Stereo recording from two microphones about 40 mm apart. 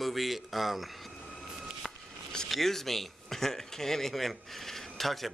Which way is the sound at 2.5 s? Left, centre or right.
Centre.